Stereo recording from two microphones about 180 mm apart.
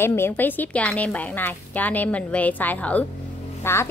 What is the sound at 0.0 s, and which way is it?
A woman's voice, 15° left (ahead or behind).